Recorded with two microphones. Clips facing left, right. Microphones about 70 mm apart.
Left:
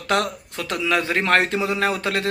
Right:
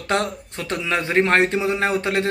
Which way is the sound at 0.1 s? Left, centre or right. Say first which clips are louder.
Left 1 dB; right.